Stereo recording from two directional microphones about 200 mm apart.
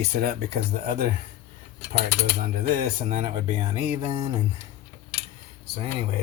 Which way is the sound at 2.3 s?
45° right (ahead or behind).